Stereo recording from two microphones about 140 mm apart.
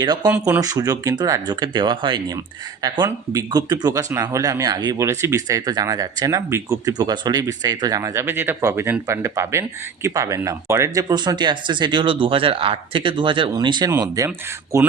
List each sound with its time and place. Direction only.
0.0 s speech: 30° right (ahead or behind)
0.3 s speech: 15° right (ahead or behind)